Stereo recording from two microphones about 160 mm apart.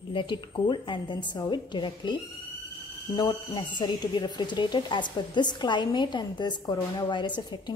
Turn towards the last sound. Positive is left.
turn(degrees=30)  # may be behind; listen again after turning